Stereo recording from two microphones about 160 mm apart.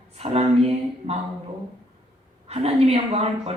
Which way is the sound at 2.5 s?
40° right (ahead or behind).